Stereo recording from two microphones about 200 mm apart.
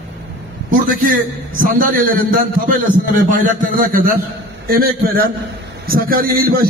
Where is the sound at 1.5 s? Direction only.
45° right (ahead or behind).